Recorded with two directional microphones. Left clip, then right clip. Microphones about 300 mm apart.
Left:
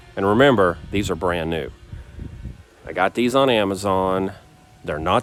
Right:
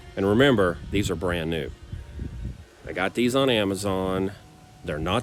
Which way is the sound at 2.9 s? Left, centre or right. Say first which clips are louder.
Left 5 dB; left.